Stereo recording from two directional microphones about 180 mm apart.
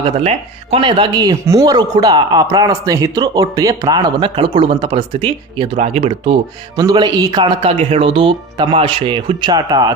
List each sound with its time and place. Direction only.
0.0 s speech: 35° right (ahead or behind)